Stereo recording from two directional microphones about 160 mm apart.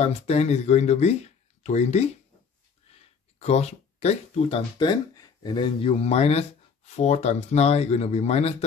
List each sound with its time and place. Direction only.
0.0 s speech: 40° left (ahead or behind)
3.3 s speech: 40° left (ahead or behind)